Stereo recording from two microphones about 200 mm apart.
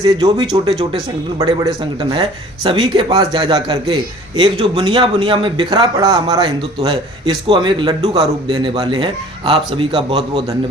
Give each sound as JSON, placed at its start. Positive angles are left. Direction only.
{"t": 0.0, "sound": "a man's voice", "side_deg": -20}